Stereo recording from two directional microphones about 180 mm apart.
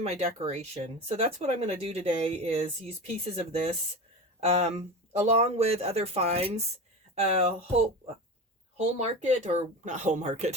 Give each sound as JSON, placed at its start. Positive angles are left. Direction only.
{"t": 0.0, "sound": "speech", "side_deg": -35}
{"t": 8.8, "sound": "speech", "side_deg": -35}